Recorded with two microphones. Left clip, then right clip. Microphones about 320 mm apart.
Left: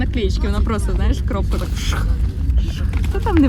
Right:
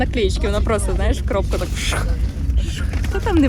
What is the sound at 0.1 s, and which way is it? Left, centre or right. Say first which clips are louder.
Speech: right 3 dB; right.